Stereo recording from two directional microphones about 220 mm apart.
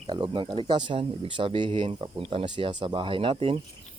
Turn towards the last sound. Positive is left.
turn(degrees=-25)  # may be behind; listen again after turning